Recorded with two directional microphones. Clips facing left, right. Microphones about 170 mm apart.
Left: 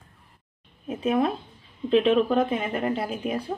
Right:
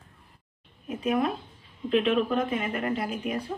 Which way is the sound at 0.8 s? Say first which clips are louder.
Left 3 dB; 30° left (ahead or behind).